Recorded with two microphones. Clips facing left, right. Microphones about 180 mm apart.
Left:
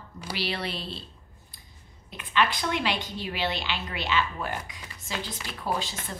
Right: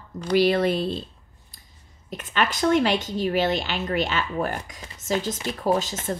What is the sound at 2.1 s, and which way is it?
Speech, 45° right (ahead or behind).